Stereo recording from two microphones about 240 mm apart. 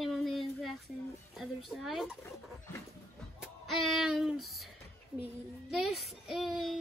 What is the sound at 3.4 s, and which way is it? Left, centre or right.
Music, centre.